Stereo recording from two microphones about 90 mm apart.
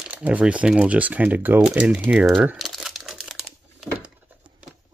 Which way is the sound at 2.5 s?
Centre (ahead or behind).